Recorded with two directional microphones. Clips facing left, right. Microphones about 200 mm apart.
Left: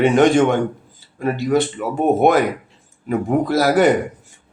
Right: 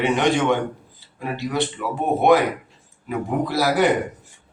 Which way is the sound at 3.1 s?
45° left (ahead or behind).